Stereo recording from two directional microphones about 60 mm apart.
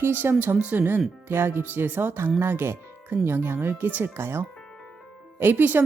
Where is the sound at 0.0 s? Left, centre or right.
Right.